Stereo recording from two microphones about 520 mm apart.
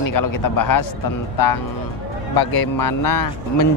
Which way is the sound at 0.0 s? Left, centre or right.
Left.